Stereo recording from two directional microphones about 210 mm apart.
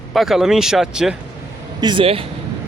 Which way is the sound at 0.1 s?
Centre (ahead or behind).